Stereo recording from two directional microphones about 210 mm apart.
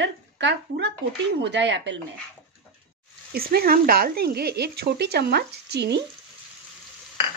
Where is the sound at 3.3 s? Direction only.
45° right (ahead or behind).